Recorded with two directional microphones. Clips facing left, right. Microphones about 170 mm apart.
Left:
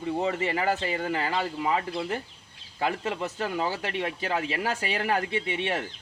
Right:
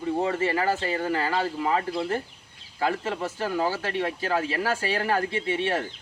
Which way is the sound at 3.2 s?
20° left (ahead or behind).